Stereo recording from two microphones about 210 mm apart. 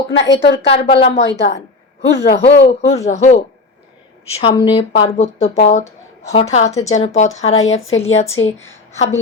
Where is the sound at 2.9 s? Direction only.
30° left (ahead or behind).